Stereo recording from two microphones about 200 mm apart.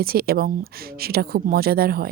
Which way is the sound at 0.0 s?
50° right (ahead or behind).